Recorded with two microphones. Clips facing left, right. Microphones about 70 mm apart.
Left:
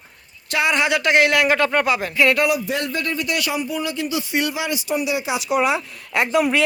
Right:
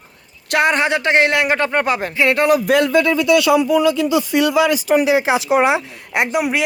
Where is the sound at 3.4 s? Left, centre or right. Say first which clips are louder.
Right 10 dB; right.